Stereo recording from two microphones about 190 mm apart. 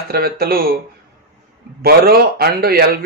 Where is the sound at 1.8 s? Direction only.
55° right (ahead or behind).